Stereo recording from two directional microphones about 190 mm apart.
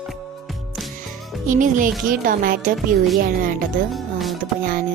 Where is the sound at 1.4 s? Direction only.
45° right (ahead or behind).